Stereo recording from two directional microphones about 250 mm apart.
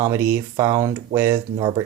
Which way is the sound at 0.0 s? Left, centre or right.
Centre.